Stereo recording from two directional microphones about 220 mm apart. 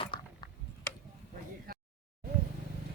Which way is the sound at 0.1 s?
20° left (ahead or behind).